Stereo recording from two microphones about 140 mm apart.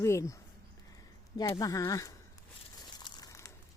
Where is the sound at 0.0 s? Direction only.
20° left (ahead or behind).